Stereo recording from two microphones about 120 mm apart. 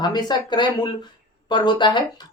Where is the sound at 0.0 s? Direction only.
35° left (ahead or behind).